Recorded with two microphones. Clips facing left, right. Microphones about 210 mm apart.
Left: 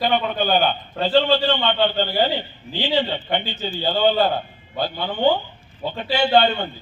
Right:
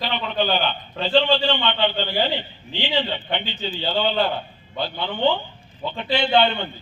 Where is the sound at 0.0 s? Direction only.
50° left (ahead or behind).